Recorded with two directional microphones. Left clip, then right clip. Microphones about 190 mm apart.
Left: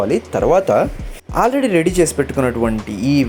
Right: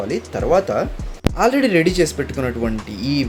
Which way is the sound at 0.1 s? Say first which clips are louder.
Even; 20° left (ahead or behind).